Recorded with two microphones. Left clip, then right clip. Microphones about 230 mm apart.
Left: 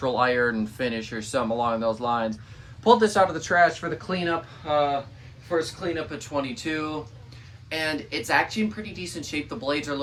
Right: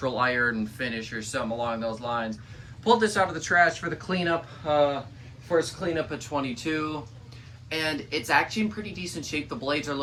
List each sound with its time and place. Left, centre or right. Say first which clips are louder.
0.0 s speech: left 2 dB; centre